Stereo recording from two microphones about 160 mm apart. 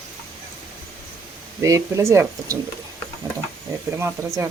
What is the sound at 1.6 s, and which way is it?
Speech, 20° right (ahead or behind).